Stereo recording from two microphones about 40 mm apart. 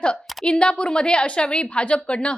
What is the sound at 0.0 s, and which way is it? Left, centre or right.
A woman's voice, left.